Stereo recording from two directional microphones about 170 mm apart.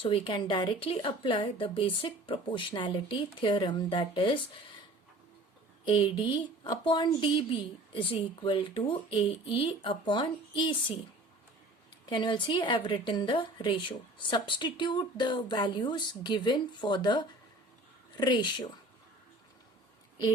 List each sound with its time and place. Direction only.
0.0 s a woman's voice: 30° left (ahead or behind)
5.8 s a woman's voice: 30° left (ahead or behind)
12.0 s a woman's voice: 25° left (ahead or behind)